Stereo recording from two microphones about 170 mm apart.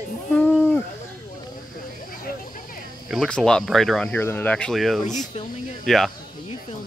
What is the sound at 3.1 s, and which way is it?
Speech, 5° left (ahead or behind).